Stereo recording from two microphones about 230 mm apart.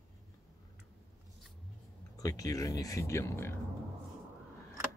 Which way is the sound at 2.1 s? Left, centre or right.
Centre.